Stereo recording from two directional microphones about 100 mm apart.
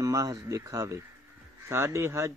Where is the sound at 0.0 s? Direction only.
35° right (ahead or behind).